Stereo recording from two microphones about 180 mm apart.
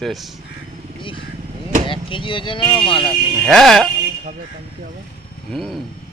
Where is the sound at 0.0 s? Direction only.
Centre (ahead or behind).